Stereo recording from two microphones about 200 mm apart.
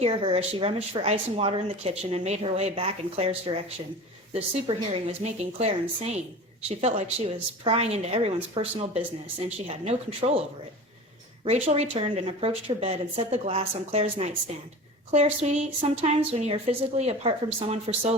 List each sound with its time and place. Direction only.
0.0 s a woman's voice: 30° right (ahead or behind)
11.4 s a woman's voice: 30° right (ahead or behind)